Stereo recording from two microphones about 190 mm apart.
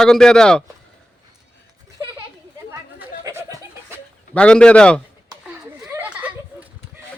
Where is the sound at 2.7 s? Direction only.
15° right (ahead or behind).